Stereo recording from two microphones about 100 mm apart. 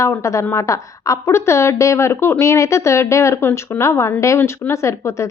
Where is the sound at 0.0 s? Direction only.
30° left (ahead or behind).